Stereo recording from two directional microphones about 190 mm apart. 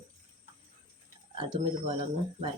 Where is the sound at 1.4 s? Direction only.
25° right (ahead or behind).